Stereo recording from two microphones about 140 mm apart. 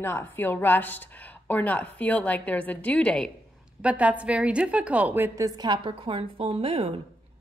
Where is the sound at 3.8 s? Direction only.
10° right (ahead or behind).